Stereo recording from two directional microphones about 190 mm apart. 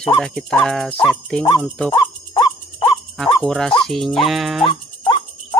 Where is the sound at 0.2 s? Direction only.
5° left (ahead or behind).